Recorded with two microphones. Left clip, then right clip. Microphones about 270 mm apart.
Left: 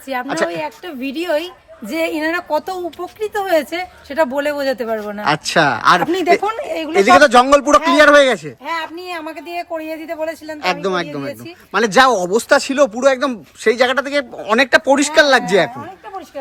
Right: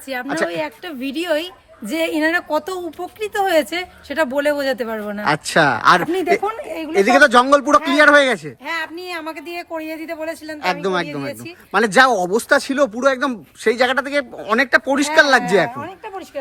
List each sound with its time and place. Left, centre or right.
0.1 s speech: centre
6.1 s a woman's voice: left
6.9 s speech: centre